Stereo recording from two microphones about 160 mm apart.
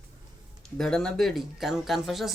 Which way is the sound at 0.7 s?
5° left (ahead or behind).